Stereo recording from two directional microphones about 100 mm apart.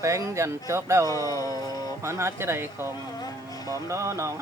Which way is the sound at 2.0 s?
25° right (ahead or behind).